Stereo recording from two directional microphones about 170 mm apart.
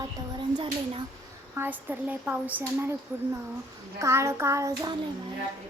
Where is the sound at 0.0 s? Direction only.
25° right (ahead or behind).